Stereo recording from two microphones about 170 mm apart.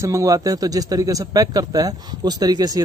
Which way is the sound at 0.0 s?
20° right (ahead or behind).